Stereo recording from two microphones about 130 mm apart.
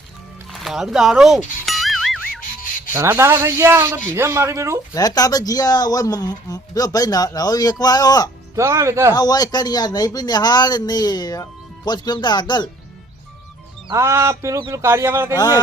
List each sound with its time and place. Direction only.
0.5 s music: centre (ahead or behind)
2.9 s a man's voice: 20° right (ahead or behind)
4.9 s speech: 30° left (ahead or behind)
8.5 s a man's voice: 20° right (ahead or behind)
9.1 s a man's voice: 30° left (ahead or behind)
13.9 s a man's voice: 25° right (ahead or behind)